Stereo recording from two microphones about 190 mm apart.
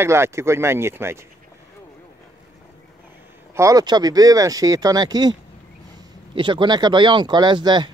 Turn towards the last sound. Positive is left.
turn(degrees=-25)  # may be behind; listen again after turning